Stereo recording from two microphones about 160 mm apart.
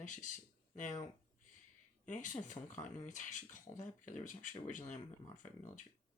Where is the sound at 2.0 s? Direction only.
50° left (ahead or behind).